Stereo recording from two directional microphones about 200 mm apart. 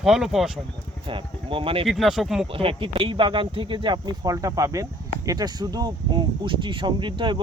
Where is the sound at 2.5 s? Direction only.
25° right (ahead or behind).